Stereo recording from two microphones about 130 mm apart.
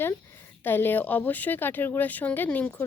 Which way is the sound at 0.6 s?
15° left (ahead or behind).